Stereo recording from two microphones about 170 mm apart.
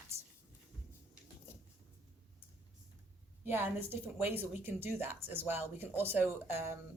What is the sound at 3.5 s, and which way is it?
Speech, 10° right (ahead or behind).